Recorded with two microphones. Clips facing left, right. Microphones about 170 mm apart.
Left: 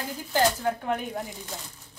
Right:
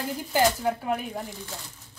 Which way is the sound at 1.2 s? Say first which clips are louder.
Even; 15° left (ahead or behind).